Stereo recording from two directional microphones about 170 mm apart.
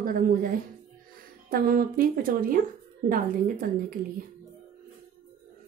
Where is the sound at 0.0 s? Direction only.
55° right (ahead or behind).